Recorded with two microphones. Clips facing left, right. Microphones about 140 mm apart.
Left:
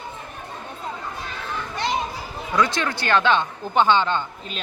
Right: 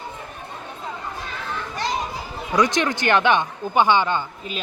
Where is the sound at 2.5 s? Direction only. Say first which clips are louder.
Right 2 dB; 15° right (ahead or behind).